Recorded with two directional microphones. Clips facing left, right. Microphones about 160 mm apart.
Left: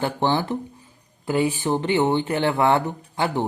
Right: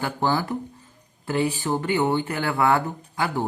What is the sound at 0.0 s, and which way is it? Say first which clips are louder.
Speech: left 2 dB; 25° left (ahead or behind).